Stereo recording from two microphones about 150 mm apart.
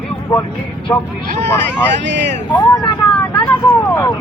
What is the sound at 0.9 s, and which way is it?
Speech, 10° left (ahead or behind).